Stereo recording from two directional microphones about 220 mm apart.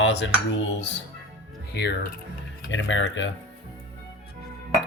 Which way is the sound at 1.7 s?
50° left (ahead or behind).